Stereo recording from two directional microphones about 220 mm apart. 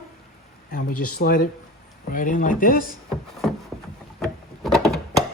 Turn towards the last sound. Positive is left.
turn(degrees=0)  # may be behind; listen again after turning